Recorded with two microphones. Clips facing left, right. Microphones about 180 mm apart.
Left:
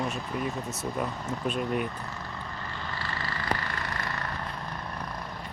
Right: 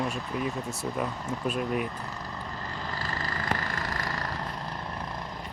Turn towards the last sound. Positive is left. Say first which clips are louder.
# right 1 dB
turn(degrees=-40)  # may be behind; listen again after turning